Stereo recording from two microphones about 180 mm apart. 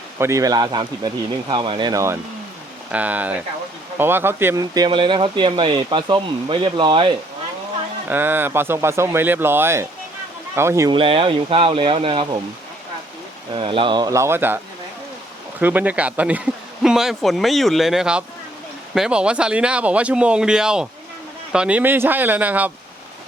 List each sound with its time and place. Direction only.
0.2 s speech: 15° right (ahead or behind)
8.1 s speech: 10° right (ahead or behind)
10.9 s speech: 30° right (ahead or behind)
13.5 s speech: 30° right (ahead or behind); by 14.6 s 10° right (ahead or behind)
15.6 s speech: 10° right (ahead or behind)